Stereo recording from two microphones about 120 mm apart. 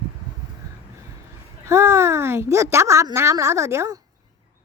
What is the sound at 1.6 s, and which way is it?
Speech, 20° right (ahead or behind).